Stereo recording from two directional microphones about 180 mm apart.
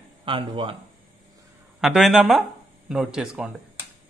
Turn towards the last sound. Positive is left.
turn(degrees=-5)  # may be behind; listen again after turning